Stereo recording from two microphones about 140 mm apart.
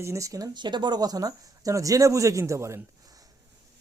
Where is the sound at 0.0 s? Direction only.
20° right (ahead or behind).